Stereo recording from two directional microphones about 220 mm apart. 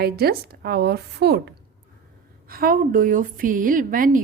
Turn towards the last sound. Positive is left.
turn(degrees=-40)  # may be behind; listen again after turning